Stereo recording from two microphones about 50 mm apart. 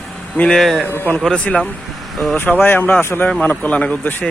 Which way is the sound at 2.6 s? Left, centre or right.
Left.